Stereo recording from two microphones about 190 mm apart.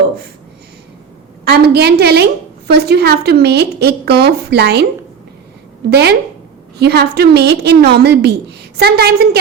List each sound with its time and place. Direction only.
1.5 s a woman's voice: 60° right (ahead or behind)
5.9 s a woman's voice: 60° right (ahead or behind)